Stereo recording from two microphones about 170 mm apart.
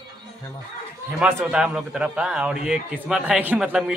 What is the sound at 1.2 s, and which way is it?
A man's voice, 5° right (ahead or behind).